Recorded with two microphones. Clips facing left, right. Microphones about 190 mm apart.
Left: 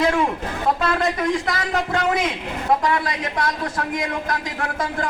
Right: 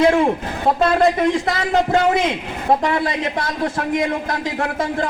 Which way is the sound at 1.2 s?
25° right (ahead or behind).